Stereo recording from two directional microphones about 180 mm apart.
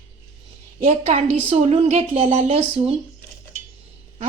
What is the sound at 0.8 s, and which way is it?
A woman's voice, 40° right (ahead or behind).